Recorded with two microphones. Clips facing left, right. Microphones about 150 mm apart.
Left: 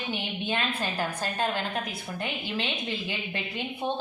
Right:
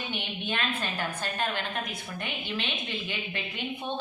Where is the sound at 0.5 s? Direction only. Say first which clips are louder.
Left 2 dB; 35° left (ahead or behind).